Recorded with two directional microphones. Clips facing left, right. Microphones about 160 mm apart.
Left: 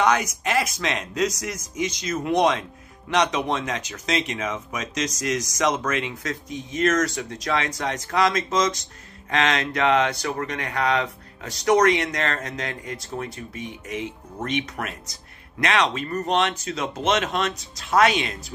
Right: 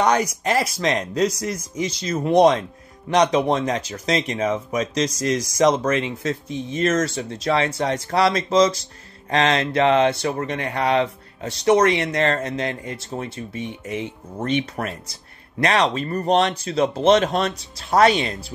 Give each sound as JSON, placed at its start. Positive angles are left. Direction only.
{"t": 0.0, "sound": "speech", "side_deg": -35}